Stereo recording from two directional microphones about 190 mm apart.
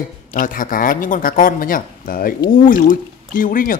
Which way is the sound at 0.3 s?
45° left (ahead or behind).